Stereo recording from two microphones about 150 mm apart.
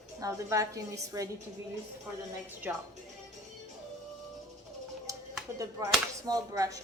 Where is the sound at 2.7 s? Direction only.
10° right (ahead or behind).